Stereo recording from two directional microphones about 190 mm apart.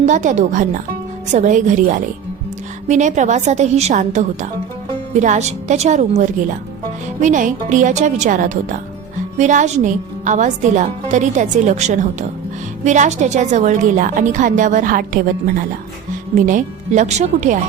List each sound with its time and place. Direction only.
0.0 s a woman's voice: 40° right (ahead or behind)